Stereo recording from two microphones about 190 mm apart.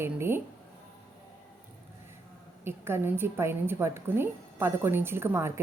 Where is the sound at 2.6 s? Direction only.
10° right (ahead or behind).